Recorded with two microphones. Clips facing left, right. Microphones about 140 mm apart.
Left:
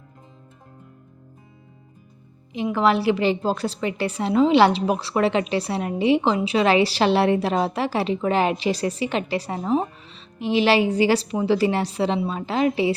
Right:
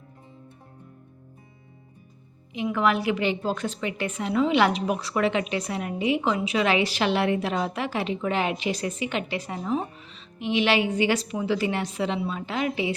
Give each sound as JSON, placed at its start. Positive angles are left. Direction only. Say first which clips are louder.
{"t": 2.5, "sound": "a woman's voice", "louder": "left 4 dB", "side_deg": 30}